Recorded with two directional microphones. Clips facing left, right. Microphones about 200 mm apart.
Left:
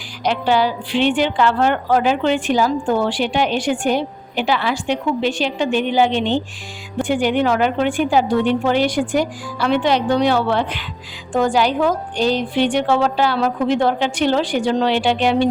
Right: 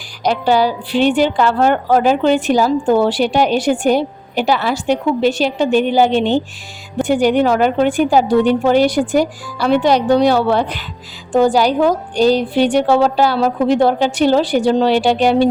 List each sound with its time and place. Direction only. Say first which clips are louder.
0.2 s a woman's voice: right 3 dB; 40° right (ahead or behind)